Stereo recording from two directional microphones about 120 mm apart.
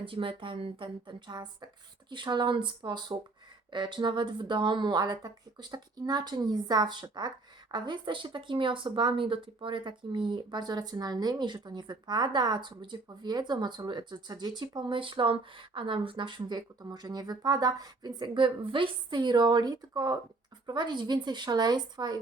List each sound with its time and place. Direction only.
0.0 s speech: 45° right (ahead or behind)